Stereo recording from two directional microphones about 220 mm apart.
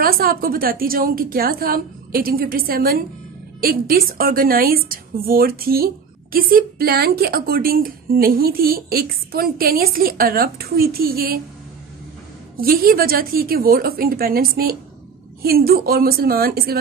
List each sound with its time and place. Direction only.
0.0 s a woman's voice: 40° right (ahead or behind)
12.5 s a woman's voice: 40° right (ahead or behind)